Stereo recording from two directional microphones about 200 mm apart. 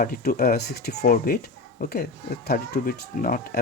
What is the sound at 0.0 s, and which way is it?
Speech, 45° left (ahead or behind).